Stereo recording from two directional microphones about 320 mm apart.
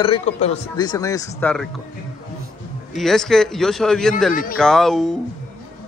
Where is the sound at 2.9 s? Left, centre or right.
Centre.